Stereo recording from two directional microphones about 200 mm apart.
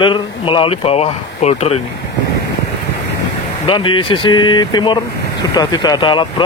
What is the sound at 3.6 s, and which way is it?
Speech, 25° left (ahead or behind).